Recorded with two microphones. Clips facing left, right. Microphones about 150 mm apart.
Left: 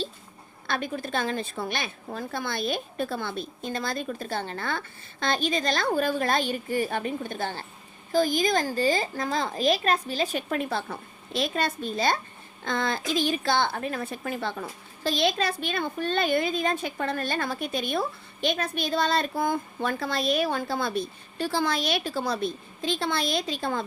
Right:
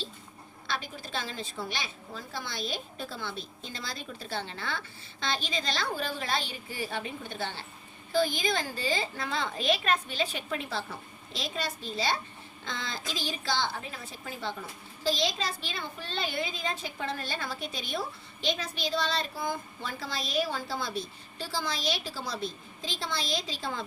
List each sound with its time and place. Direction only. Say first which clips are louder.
0.7 s a woman's voice: left 7 dB; 55° left (ahead or behind)